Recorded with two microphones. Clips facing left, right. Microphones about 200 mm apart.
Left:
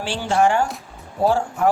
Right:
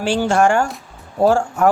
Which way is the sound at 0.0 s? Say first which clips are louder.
Right 4 dB; 45° right (ahead or behind).